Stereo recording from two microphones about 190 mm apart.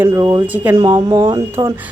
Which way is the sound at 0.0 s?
15° right (ahead or behind).